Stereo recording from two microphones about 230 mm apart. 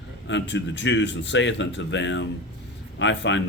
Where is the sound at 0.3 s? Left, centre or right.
Left.